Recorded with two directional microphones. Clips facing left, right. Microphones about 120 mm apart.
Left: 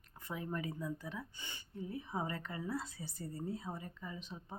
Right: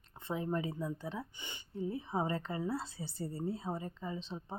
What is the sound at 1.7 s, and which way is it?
A woman's voice, 30° right (ahead or behind).